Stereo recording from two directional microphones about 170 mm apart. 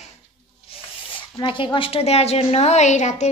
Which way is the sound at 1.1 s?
30° left (ahead or behind).